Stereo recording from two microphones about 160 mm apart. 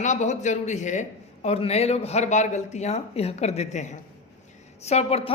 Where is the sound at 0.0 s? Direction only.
50° left (ahead or behind).